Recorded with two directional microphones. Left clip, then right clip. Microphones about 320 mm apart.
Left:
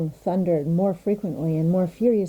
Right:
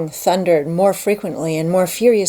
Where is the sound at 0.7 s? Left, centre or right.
Centre.